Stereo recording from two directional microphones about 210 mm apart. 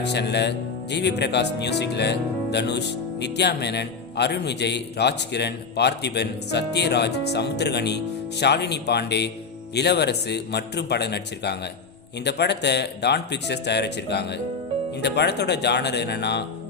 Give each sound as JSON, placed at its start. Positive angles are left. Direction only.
{"t": 0.0, "sound": "speech", "side_deg": 55}